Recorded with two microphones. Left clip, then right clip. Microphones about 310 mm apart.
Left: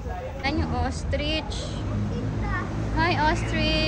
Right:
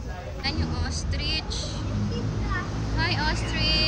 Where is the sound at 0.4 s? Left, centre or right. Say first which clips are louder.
Left 4 dB; centre.